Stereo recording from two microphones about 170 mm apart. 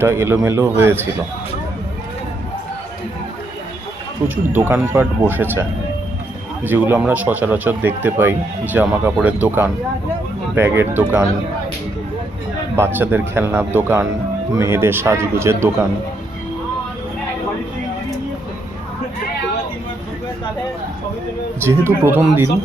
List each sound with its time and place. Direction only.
0.0 s speech: 15° right (ahead or behind)
4.5 s speech: 15° right (ahead or behind)
6.7 s speech: 10° right (ahead or behind)
12.7 s speech: 15° right (ahead or behind)
21.6 s speech: 15° right (ahead or behind)